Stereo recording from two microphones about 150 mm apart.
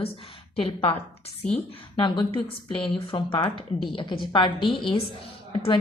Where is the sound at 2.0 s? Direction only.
35° left (ahead or behind).